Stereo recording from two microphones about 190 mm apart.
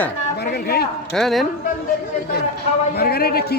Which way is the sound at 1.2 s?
Centre (ahead or behind).